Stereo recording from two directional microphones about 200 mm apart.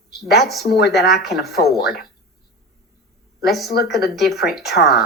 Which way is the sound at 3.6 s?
55° left (ahead or behind).